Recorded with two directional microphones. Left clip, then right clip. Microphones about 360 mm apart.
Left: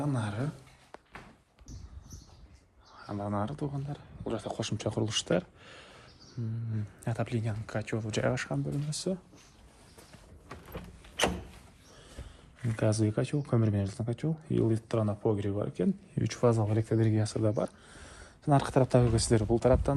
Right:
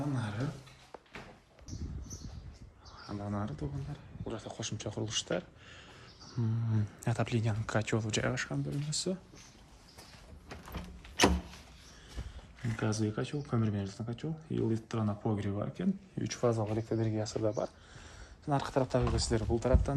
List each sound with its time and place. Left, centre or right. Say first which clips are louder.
0.0 s a sound: left 4 dB; centre
3.1 s speech: left 6 dB; centre
6.7 s speech: right 2 dB; centre
12.7 s speech: left 5 dB; centre